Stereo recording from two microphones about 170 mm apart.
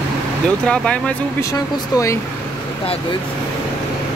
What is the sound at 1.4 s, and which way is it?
Speech, 20° left (ahead or behind).